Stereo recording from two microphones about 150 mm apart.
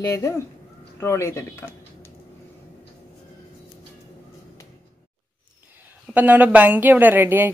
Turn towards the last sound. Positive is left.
turn(degrees=-15)  # may be behind; listen again after turning